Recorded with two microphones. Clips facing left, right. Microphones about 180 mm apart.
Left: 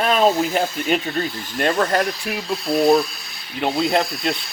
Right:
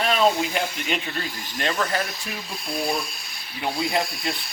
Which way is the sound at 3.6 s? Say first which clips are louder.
Left 6 dB; 55° left (ahead or behind).